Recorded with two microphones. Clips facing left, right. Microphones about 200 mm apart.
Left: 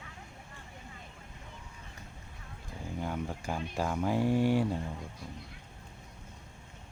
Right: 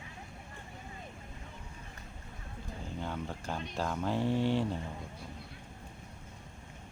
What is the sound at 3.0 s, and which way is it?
Speech, 10° left (ahead or behind).